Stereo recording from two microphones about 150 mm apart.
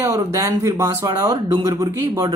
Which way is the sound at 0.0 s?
15° right (ahead or behind).